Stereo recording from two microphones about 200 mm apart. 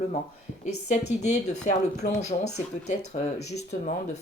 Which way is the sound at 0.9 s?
35° left (ahead or behind).